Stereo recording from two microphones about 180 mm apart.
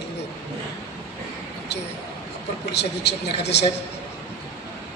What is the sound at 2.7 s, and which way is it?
Speech, 70° left (ahead or behind).